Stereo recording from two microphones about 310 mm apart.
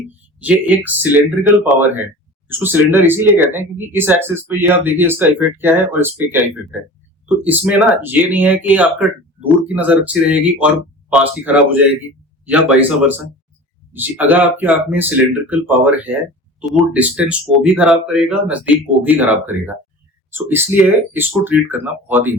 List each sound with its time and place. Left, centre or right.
0.3 s speech: centre
2.5 s speech: centre